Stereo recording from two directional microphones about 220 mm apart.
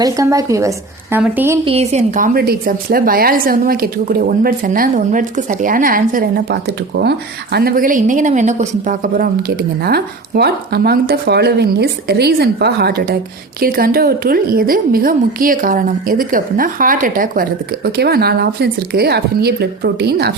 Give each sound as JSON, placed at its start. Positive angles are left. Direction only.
{"t": 0.0, "sound": "a woman's voice", "side_deg": -15}
{"t": 1.6, "sound": "a woman's voice", "side_deg": -30}